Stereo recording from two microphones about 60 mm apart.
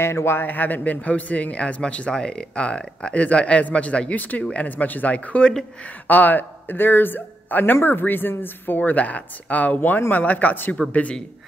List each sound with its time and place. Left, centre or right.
0.0 s a man's voice: left